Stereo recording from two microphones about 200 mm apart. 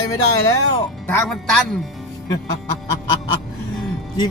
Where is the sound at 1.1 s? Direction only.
5° left (ahead or behind).